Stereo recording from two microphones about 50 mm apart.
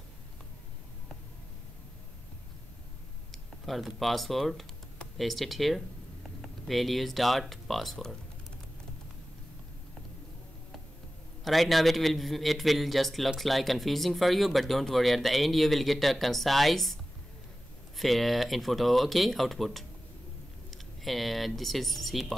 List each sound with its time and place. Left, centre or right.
3.3 s speech: centre
11.4 s speech: centre